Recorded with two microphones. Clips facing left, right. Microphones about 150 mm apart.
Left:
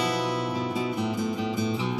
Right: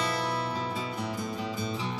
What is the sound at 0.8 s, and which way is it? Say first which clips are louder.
Music: left 6 dB; 15° left (ahead or behind).